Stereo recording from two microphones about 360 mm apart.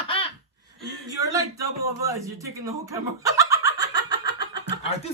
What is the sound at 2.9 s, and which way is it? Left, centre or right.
Chicken, centre.